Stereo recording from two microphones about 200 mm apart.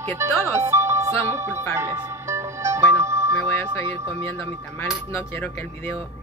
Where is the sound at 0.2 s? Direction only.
10° right (ahead or behind).